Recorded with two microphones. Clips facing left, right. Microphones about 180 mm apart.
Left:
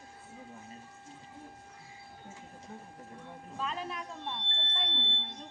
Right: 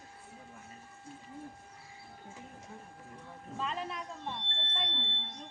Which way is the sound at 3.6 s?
Centre (ahead or behind).